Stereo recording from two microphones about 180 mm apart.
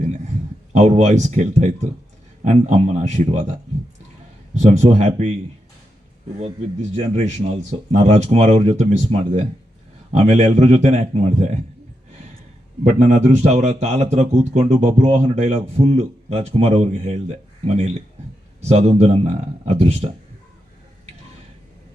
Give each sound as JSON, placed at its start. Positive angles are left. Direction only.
{"t": 0.7, "sound": "speech", "side_deg": -40}
{"t": 4.5, "sound": "speech", "side_deg": -40}
{"t": 6.9, "sound": "speech", "side_deg": -35}
{"t": 13.0, "sound": "speech", "side_deg": -40}
{"t": 18.6, "sound": "speech", "side_deg": -35}